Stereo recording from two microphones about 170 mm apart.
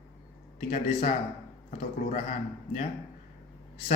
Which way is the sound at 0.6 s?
45° left (ahead or behind).